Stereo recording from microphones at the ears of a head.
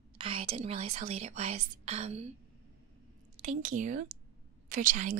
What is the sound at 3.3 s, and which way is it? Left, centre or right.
A woman's voice, right.